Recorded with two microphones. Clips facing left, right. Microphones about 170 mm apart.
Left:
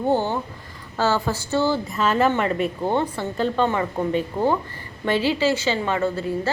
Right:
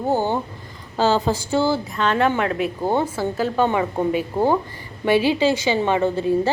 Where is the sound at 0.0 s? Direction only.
10° right (ahead or behind).